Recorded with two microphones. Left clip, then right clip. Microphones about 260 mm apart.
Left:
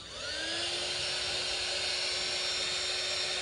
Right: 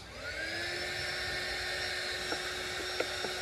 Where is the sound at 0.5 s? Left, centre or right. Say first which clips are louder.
Left 3 dB; left.